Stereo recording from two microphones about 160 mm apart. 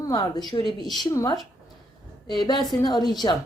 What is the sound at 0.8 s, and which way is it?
Speech, centre (ahead or behind).